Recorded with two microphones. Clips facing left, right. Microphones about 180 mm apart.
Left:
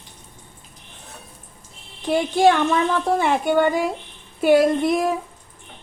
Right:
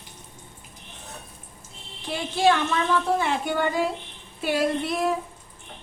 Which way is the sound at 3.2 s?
55° left (ahead or behind).